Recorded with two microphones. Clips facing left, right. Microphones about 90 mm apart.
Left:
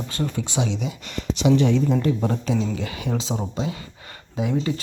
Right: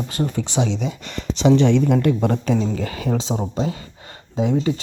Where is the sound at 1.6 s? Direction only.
70° right (ahead or behind).